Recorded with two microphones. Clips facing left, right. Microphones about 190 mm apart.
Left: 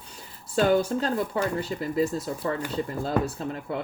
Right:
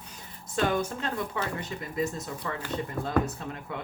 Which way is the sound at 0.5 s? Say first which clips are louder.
Left 6 dB; 35° left (ahead or behind).